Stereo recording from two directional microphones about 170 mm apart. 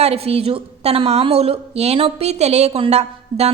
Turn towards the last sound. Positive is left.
turn(degrees=-40)  # may be behind; listen again after turning